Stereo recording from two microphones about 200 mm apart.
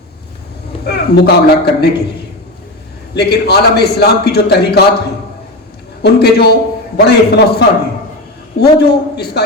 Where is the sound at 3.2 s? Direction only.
55° left (ahead or behind).